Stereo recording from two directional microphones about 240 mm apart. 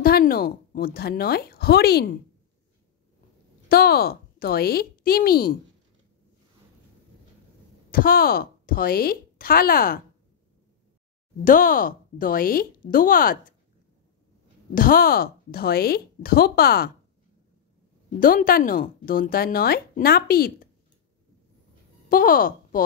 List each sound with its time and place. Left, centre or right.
0.0 s a woman's voice: left
3.6 s speech: left
7.9 s speech: left
11.4 s speech: left
14.7 s speech: left
18.2 s speech: left
22.1 s speech: left